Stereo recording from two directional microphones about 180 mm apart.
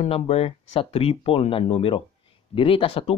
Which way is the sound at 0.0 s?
35° left (ahead or behind).